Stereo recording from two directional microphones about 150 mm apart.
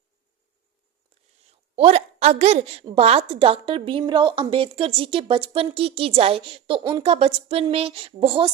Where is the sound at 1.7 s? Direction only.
45° right (ahead or behind).